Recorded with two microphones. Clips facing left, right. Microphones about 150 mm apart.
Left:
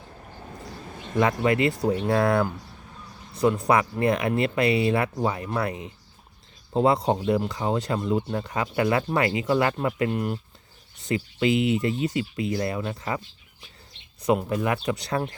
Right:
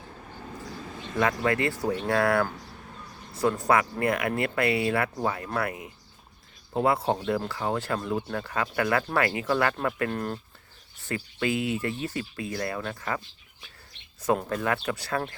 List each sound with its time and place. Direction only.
1.2 s speech: 20° left (ahead or behind)
3.3 s speech: 15° left (ahead or behind)
14.3 s speech: 15° left (ahead or behind)